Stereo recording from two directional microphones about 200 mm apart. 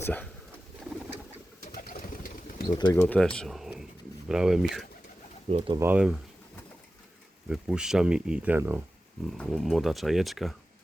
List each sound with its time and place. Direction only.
0.0 s speech: 10° left (ahead or behind)
1.6 s pigeon: 45° left (ahead or behind)
2.6 s speech: 20° left (ahead or behind)
3.1 s speech: 5° left (ahead or behind)
5.5 s speech: 30° right (ahead or behind)
5.8 s speech: 5° right (ahead or behind)
7.5 s speech: 5° right (ahead or behind)